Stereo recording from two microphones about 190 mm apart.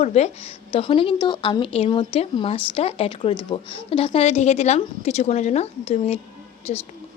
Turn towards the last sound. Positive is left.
turn(degrees=35)  # may be behind; listen again after turning